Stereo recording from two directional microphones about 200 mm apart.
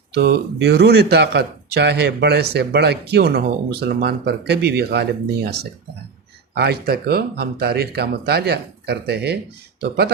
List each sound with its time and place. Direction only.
0.1 s speech: 55° right (ahead or behind)